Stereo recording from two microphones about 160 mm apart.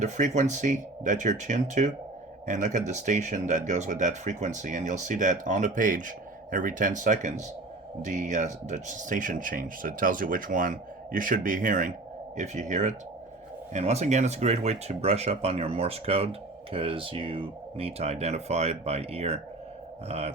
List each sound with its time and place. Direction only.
0.0 s speech: 50° right (ahead or behind)